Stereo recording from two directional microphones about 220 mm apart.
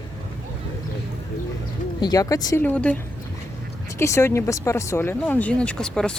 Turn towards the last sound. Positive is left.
turn(degrees=5)  # may be behind; listen again after turning